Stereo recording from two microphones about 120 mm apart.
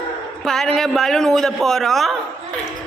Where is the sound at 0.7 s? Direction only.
Centre (ahead or behind).